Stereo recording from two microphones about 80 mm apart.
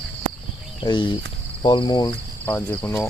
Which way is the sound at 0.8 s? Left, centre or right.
Left.